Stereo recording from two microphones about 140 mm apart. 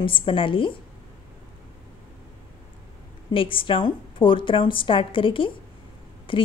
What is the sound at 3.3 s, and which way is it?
A woman's voice, 40° left (ahead or behind).